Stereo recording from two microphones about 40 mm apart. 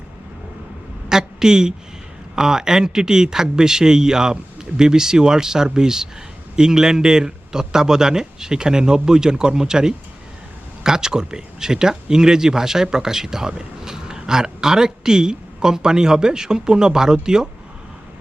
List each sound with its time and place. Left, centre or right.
1.1 s a woman's voice: centre